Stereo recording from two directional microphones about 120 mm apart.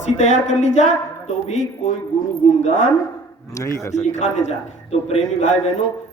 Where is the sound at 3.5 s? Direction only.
25° left (ahead or behind).